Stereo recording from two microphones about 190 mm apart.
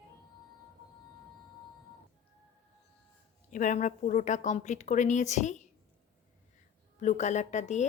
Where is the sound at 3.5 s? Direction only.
40° left (ahead or behind).